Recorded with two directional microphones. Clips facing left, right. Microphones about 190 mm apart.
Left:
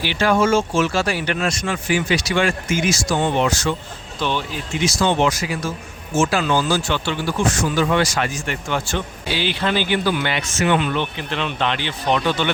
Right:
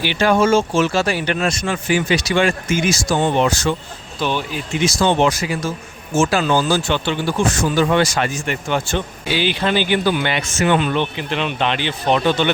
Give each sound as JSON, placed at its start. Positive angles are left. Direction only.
{"t": 0.0, "sound": "speech", "side_deg": -20}
{"t": 2.9, "sound": "speech", "side_deg": -35}
{"t": 4.2, "sound": "speech", "side_deg": -10}
{"t": 4.9, "sound": "speech", "side_deg": -30}
{"t": 10.7, "sound": "speech", "side_deg": -35}
{"t": 10.9, "sound": "speech", "side_deg": -15}